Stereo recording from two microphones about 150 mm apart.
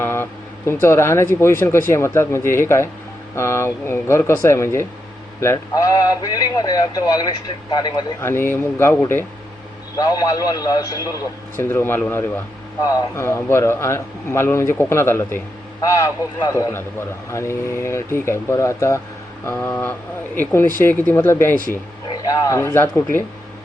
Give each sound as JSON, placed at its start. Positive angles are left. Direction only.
{"t": 0.0, "sound": "vehicle", "side_deg": 15}
{"t": 1.4, "sound": "a man's voice", "side_deg": 15}